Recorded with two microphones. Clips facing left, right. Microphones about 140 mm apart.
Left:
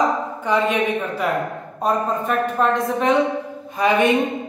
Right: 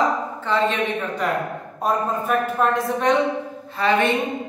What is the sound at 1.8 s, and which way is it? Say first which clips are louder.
A woman's voice: left 2 dB; centre (ahead or behind).